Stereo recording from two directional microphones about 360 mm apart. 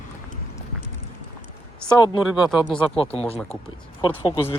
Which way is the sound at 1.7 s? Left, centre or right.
Centre.